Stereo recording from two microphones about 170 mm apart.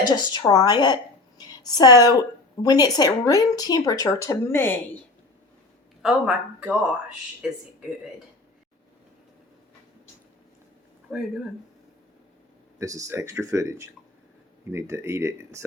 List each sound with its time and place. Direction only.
0.0 s a woman's voice: 25° left (ahead or behind)
1.4 s a sound: 25° left (ahead or behind)
2.6 s a woman's voice: 20° left (ahead or behind)
6.0 s speech: 5° right (ahead or behind)
11.1 s speech: 10° right (ahead or behind)
12.8 s speech: 20° right (ahead or behind)